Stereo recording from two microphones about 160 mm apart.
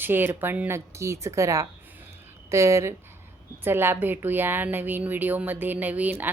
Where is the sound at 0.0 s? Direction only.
15° right (ahead or behind).